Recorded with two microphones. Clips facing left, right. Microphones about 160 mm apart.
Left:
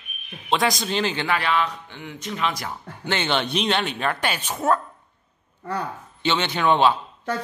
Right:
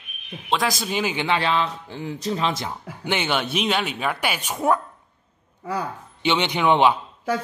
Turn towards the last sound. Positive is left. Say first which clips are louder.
# right 1 dB
turn(degrees=-15)  # may be behind; listen again after turning